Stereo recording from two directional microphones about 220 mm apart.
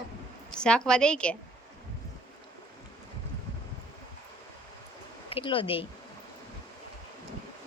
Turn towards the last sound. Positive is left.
turn(degrees=25)  # may be behind; listen again after turning